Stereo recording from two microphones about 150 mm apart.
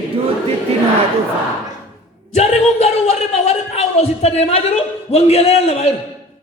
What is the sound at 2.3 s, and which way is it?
Speech, 45° left (ahead or behind).